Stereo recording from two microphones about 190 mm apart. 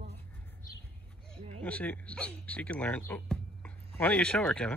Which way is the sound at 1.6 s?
10° left (ahead or behind).